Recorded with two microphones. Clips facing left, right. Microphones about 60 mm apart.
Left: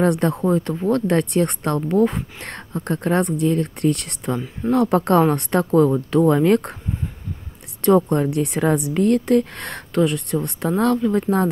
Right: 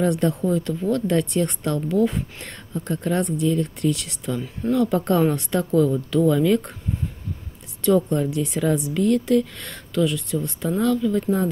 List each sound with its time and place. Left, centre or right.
0.0 s speech: left
0.5 s a woman's voice: left
1.8 s a woman's voice: left
7.8 s a woman's voice: left